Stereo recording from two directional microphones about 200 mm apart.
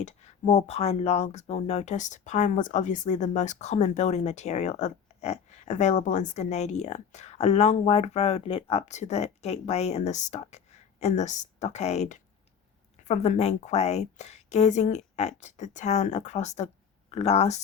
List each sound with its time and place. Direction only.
0.0 s speech: 35° left (ahead or behind)